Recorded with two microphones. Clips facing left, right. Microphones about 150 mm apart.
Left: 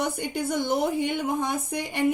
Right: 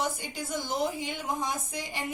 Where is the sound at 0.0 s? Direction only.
60° left (ahead or behind).